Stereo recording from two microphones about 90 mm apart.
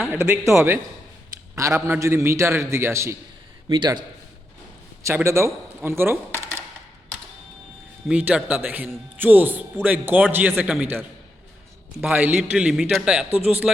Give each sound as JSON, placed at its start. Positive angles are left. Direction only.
{"t": 0.1, "sound": "a man's voice", "side_deg": -25}
{"t": 3.7, "sound": "a man's voice", "side_deg": -55}
{"t": 5.0, "sound": "speech", "side_deg": -30}
{"t": 8.1, "sound": "a man's voice", "side_deg": -15}
{"t": 12.1, "sound": "speech", "side_deg": -20}
{"t": 12.4, "sound": "a man's voice", "side_deg": -5}